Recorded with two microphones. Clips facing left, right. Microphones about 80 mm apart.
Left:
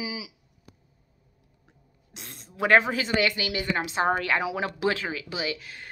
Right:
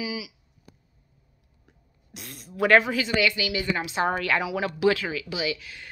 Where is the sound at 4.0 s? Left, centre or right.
Left.